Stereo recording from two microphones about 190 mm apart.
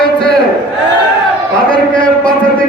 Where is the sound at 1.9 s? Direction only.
5° left (ahead or behind).